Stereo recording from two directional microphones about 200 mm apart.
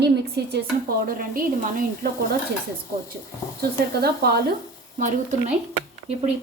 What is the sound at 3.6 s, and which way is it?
Speech, 50° right (ahead or behind).